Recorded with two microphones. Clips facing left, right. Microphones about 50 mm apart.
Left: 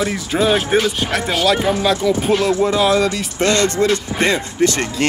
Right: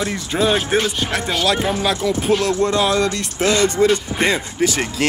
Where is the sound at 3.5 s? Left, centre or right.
Centre.